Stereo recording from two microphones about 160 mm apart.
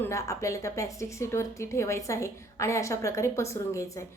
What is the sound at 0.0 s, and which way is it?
A woman's voice, 20° left (ahead or behind).